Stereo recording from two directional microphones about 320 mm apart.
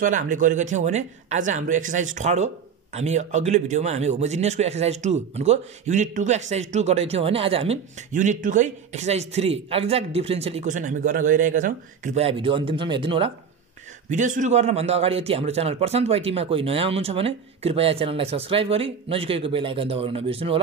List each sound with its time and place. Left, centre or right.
0.0 s a man's voice: right